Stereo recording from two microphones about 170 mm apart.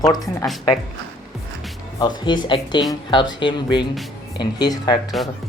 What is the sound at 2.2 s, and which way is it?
A woman's voice, 25° left (ahead or behind).